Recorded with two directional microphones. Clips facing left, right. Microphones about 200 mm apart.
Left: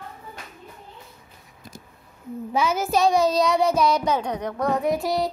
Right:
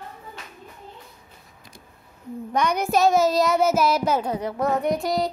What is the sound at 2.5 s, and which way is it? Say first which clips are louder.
Child singing: even; 5° left (ahead or behind).